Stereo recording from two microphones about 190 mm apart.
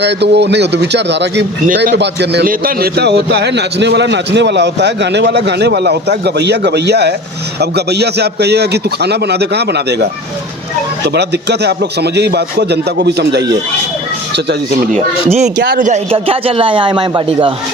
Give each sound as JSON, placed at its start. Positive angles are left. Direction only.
{"t": 0.0, "sound": "a man's voice", "side_deg": -65}
{"t": 11.1, "sound": "a man's voice", "side_deg": -60}
{"t": 14.9, "sound": "speech", "side_deg": -35}
{"t": 15.6, "sound": "a man's voice", "side_deg": -45}
{"t": 16.0, "sound": "speech", "side_deg": -30}